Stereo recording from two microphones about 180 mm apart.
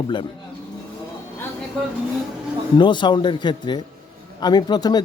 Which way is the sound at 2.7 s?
25° left (ahead or behind).